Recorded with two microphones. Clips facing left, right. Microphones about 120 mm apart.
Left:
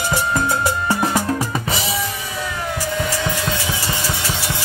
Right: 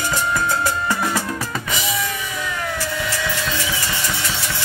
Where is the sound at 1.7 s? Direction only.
30° left (ahead or behind).